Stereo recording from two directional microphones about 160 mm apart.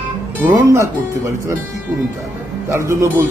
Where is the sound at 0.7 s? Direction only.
15° right (ahead or behind).